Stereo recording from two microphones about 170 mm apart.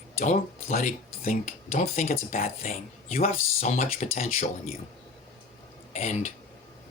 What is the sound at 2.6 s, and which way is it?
Speech, 40° left (ahead or behind).